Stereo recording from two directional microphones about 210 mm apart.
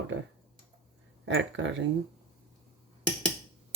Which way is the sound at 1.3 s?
60° right (ahead or behind).